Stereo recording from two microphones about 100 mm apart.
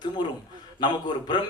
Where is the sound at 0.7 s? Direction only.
45° left (ahead or behind).